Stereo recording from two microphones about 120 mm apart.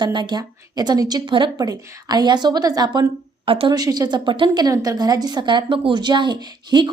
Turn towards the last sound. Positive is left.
turn(degrees=-40)  # may be behind; listen again after turning